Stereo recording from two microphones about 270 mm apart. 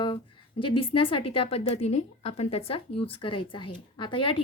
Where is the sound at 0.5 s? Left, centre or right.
Left.